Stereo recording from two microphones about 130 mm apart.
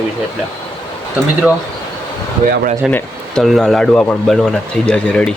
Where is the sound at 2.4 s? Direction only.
90° right.